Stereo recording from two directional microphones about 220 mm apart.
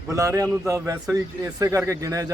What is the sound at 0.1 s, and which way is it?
A man's voice, 15° right (ahead or behind).